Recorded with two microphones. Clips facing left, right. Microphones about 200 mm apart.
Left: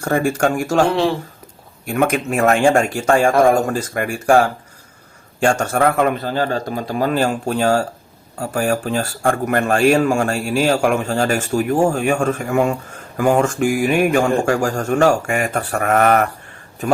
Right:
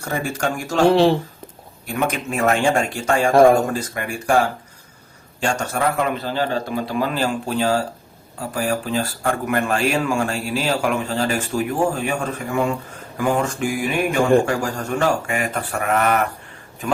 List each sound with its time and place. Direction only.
0.0 s speech: 50° left (ahead or behind)
2.0 s speech: 50° left (ahead or behind)